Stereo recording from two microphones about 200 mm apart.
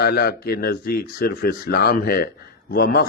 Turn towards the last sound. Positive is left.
turn(degrees=50)  # may be behind; listen again after turning